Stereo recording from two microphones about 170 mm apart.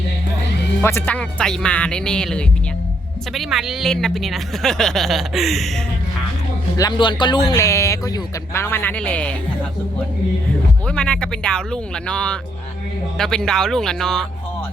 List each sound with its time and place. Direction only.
0.8 s speech: 15° left (ahead or behind)
6.7 s a man's voice: 25° left (ahead or behind); by 9.3 s 10° left (ahead or behind)
10.8 s speech: 5° left (ahead or behind)